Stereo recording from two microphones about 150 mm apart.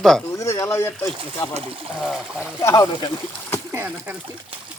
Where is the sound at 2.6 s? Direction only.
20° left (ahead or behind).